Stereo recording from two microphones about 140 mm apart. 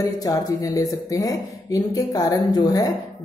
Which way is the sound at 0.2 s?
25° left (ahead or behind).